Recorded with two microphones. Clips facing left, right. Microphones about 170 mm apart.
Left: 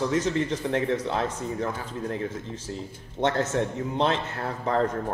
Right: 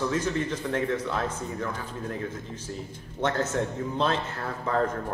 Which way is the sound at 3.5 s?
20° left (ahead or behind).